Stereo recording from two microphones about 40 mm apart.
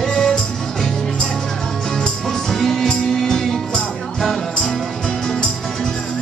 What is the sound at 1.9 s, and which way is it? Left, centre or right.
Music, centre.